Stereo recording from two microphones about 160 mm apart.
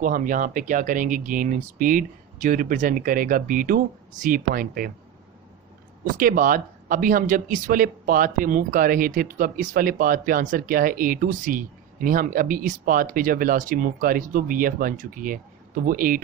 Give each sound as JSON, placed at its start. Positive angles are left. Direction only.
{"t": 0.0, "sound": "speech", "side_deg": -55}
{"t": 6.1, "sound": "speech", "side_deg": -60}